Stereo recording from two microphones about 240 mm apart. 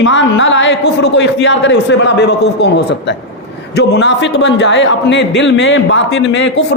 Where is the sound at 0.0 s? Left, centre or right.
Left.